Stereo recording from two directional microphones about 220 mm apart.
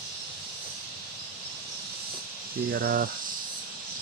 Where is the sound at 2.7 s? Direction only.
45° right (ahead or behind).